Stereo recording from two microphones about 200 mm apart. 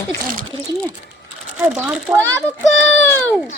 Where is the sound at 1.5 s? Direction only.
10° right (ahead or behind).